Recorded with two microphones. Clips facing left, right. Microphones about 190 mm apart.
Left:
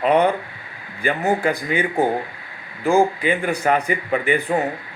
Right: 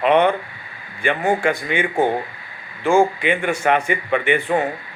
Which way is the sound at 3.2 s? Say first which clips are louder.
Even; 35° left (ahead or behind).